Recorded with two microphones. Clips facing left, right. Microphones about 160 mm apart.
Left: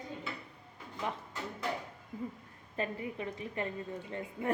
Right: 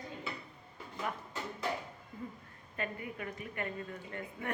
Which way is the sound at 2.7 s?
30° left (ahead or behind).